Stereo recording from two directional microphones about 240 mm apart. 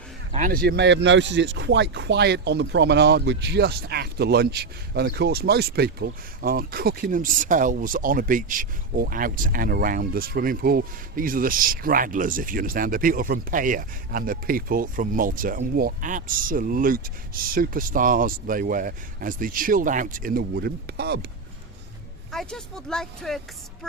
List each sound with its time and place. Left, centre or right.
0.3 s speech: right
22.3 s speech: centre